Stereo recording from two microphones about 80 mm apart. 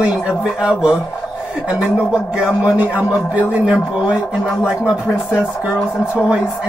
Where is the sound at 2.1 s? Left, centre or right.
Centre.